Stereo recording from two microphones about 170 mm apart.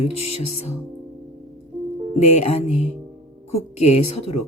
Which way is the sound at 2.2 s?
40° left (ahead or behind).